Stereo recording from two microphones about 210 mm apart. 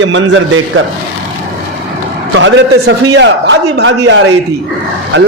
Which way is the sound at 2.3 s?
60° right (ahead or behind).